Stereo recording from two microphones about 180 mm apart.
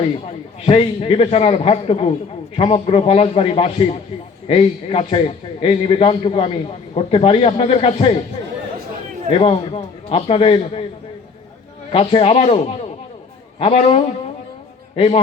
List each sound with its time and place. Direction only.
0.3 s a man's voice: 30° left (ahead or behind)
9.4 s a man's voice: 30° left (ahead or behind)
11.9 s a man's voice: 35° left (ahead or behind)